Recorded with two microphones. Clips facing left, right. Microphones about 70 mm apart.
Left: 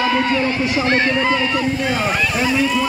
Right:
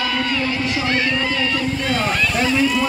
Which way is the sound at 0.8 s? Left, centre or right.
Left.